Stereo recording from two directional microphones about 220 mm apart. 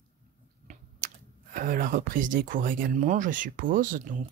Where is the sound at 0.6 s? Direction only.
40° right (ahead or behind).